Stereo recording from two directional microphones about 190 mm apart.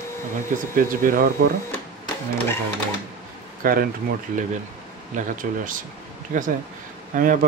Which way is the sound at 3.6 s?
50° right (ahead or behind).